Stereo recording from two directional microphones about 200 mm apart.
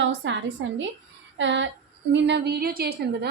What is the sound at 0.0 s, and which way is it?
A woman's voice, 65° right (ahead or behind).